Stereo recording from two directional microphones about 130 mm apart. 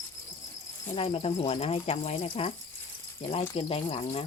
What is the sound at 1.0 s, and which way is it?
Speech, 45° left (ahead or behind).